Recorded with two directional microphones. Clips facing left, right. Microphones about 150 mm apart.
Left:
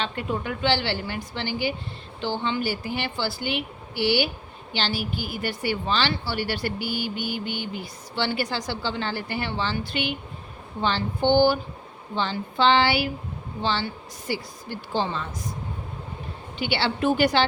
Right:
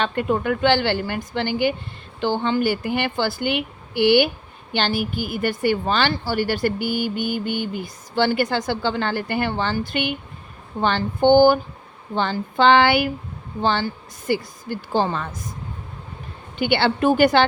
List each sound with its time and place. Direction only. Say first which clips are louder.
0.0 s a woman's voice: right 7 dB; 55° right (ahead or behind)
16.6 s a woman's voice: right 6 dB; 55° right (ahead or behind)